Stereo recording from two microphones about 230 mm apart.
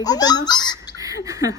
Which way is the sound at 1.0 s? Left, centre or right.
Centre.